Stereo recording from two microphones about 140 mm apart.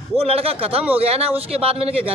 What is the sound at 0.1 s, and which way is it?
A man's voice, 45° right (ahead or behind).